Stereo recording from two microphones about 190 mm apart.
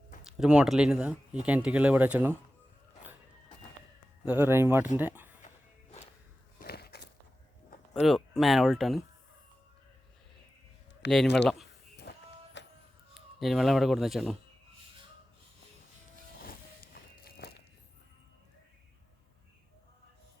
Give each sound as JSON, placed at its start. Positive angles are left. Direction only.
{"t": 0.3, "sound": "speech", "side_deg": -5}
{"t": 4.3, "sound": "speech", "side_deg": -10}
{"t": 6.6, "sound": "a sound", "side_deg": 55}
{"t": 8.0, "sound": "speech", "side_deg": 0}
{"t": 11.0, "sound": "speech", "side_deg": 65}
{"t": 11.4, "sound": "speech", "side_deg": 0}
{"t": 12.1, "sound": "a sound", "side_deg": 60}
{"t": 12.6, "sound": "music", "side_deg": 65}
{"t": 13.1, "sound": "speech", "side_deg": 0}
{"t": 16.4, "sound": "music", "side_deg": 50}